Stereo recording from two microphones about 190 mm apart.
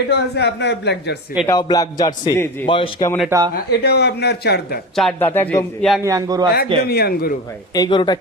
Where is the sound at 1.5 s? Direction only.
20° left (ahead or behind).